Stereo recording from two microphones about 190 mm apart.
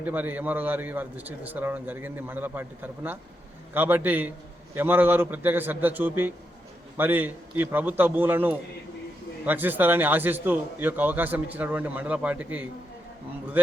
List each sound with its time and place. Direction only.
0.0 s a man's voice: 10° right (ahead or behind)